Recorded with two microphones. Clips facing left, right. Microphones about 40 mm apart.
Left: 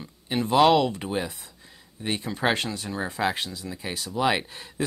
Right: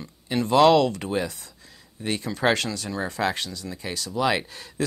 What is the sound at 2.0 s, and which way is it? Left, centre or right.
Speech, left.